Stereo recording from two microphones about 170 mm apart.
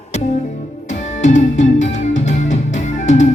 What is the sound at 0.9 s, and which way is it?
Music, 45° left (ahead or behind).